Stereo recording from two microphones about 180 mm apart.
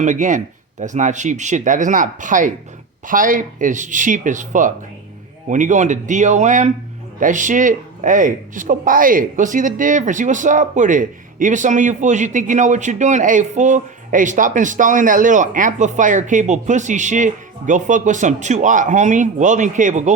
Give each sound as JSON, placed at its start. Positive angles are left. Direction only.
{"t": 0.0, "sound": "speech", "side_deg": -45}